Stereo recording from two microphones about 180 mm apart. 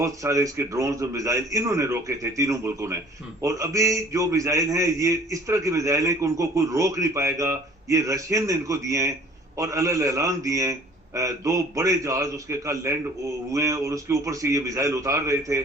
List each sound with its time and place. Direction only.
0.0 s a man's voice: 15° right (ahead or behind)